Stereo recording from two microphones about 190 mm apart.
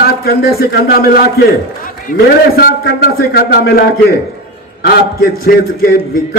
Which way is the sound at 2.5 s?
55° left (ahead or behind).